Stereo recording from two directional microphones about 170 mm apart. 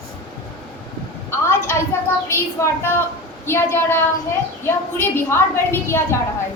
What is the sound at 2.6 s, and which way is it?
A woman's voice, 15° left (ahead or behind).